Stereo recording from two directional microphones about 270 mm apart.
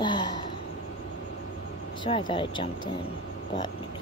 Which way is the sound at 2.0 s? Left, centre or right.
Centre.